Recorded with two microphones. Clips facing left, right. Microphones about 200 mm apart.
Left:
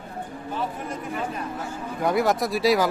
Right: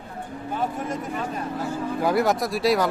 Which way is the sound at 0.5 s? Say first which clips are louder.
Right 3 dB; 45° right (ahead or behind).